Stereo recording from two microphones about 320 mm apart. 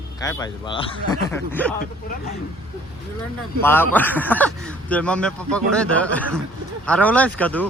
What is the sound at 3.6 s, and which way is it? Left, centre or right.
Speech, centre.